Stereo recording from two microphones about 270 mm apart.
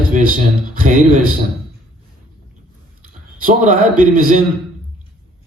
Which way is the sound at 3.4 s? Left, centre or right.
Right.